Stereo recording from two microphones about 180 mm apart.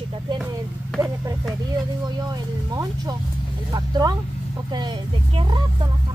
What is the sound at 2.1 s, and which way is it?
Speech, 20° right (ahead or behind).